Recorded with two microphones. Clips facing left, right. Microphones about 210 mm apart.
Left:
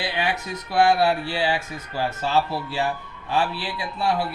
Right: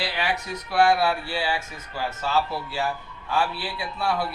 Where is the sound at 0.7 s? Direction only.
35° left (ahead or behind).